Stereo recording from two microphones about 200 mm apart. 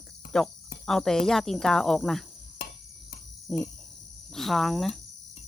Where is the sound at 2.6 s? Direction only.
50° left (ahead or behind).